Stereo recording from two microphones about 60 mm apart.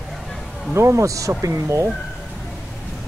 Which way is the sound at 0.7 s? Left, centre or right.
Right.